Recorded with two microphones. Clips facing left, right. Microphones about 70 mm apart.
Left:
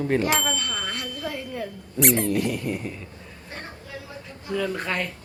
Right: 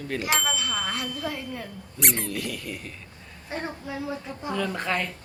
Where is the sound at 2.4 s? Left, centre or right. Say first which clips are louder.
Left 7 dB; left.